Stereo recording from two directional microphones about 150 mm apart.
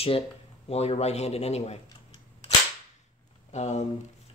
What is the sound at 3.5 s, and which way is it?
Speech, 50° left (ahead or behind).